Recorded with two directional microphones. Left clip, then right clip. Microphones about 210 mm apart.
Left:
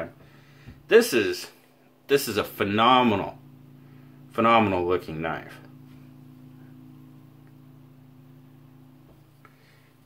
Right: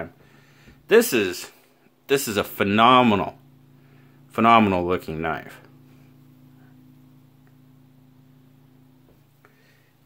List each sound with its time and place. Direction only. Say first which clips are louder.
0.7 s speech: right 1 dB; 55° right (ahead or behind)